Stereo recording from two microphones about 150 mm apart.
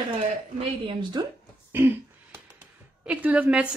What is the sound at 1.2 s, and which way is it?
Speech, 30° right (ahead or behind).